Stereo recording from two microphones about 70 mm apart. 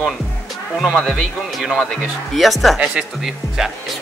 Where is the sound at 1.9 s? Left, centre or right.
Centre.